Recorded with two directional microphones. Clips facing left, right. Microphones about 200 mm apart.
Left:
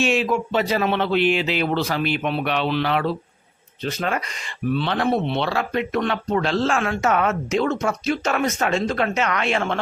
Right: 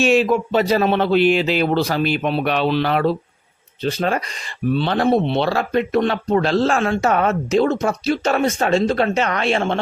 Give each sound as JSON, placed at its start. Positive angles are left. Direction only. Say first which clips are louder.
{"t": 0.0, "sound": "speech", "louder": "right 5 dB", "side_deg": -40}